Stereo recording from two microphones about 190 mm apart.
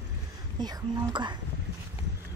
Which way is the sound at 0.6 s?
20° right (ahead or behind).